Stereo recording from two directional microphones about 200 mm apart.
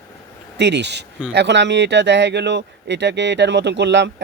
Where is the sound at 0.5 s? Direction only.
60° right (ahead or behind).